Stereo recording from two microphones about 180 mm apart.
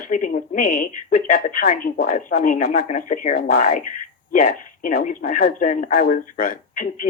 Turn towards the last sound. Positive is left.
turn(degrees=50)  # may be behind; listen again after turning